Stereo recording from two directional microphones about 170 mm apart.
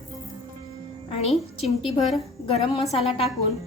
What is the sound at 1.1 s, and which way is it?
A woman's voice, 35° left (ahead or behind).